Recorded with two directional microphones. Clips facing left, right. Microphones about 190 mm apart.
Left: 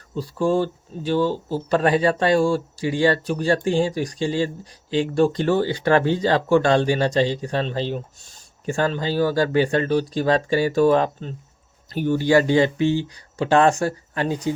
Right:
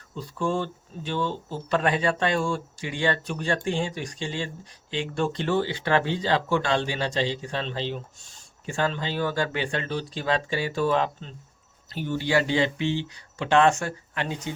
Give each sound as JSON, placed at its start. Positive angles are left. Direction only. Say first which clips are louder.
{"t": 0.2, "sound": "speech", "louder": "left 7 dB", "side_deg": 35}